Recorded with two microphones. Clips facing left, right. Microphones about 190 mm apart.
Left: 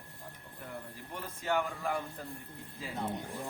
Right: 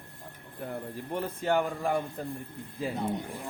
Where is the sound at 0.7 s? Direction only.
55° right (ahead or behind).